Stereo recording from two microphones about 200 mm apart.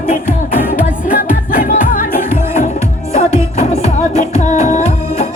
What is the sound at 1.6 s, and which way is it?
Music, 45° left (ahead or behind).